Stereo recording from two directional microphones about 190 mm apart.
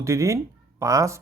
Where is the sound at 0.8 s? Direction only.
15° right (ahead or behind).